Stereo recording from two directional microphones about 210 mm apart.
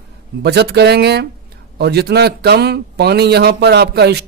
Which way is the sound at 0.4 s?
55° right (ahead or behind).